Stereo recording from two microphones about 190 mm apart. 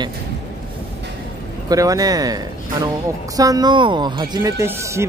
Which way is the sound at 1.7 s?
20° right (ahead or behind).